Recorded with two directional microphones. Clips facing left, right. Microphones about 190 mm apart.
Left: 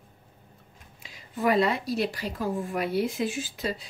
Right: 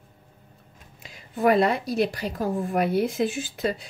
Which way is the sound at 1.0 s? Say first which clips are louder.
Right 5 dB; 50° right (ahead or behind).